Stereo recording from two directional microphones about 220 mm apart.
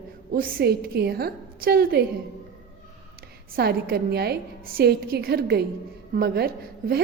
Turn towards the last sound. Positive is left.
turn(degrees=-45)  # may be behind; listen again after turning